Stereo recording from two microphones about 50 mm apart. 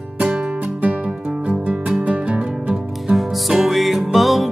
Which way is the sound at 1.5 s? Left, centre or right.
Right.